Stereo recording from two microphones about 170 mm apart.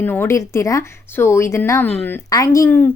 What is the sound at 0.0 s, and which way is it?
Speech, 10° left (ahead or behind).